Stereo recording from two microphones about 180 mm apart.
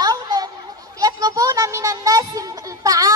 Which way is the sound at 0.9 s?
20° right (ahead or behind).